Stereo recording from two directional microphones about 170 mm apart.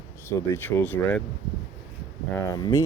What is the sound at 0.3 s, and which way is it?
Speech, 15° left (ahead or behind).